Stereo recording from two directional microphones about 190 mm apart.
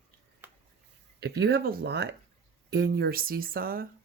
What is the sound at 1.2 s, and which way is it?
Speech, 60° right (ahead or behind).